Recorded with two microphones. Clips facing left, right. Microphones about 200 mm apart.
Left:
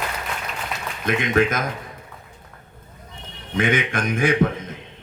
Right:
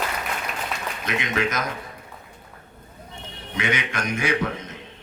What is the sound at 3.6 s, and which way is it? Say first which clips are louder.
Speech: left 5 dB; 50° left (ahead or behind).